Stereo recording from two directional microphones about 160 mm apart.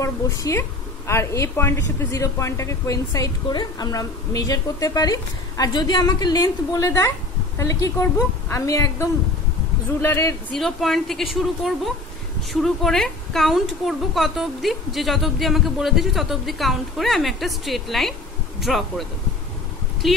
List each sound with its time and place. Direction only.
0.0 s a woman's voice: 20° left (ahead or behind)
10.0 s speech: 15° left (ahead or behind)
10.5 s a woman's voice: centre (ahead or behind)